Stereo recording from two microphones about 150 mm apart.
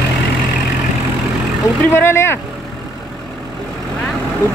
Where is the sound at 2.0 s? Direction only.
15° left (ahead or behind).